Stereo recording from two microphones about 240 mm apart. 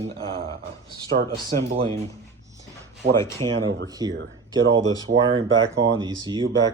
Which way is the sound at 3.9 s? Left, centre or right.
Centre.